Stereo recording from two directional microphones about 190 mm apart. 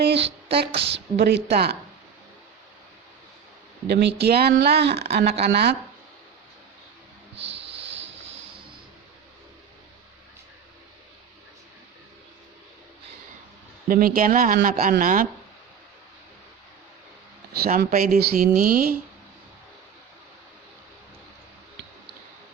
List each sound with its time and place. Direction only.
0.0 s a sound: 65° right (ahead or behind)
0.9 s speech: 65° right (ahead or behind)
3.8 s speech: 60° right (ahead or behind)
7.8 s a sound: 70° right (ahead or behind)
13.8 s speech: 50° right (ahead or behind)
17.5 s speech: 55° right (ahead or behind)